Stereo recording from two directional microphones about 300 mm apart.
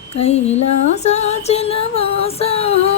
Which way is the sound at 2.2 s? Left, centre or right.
Centre.